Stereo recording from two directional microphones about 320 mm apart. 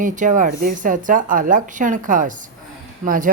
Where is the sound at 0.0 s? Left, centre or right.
Right.